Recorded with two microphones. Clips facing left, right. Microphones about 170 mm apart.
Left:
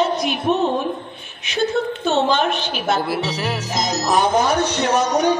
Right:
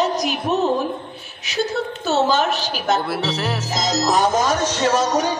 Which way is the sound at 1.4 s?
40° right (ahead or behind).